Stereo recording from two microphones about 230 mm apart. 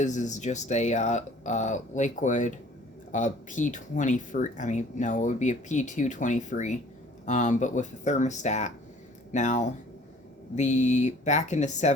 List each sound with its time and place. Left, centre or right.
0.0 s speech: left